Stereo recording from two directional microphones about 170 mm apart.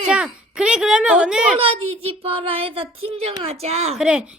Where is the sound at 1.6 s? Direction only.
35° right (ahead or behind).